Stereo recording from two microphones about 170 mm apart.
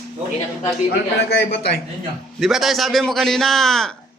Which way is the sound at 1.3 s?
75° left (ahead or behind).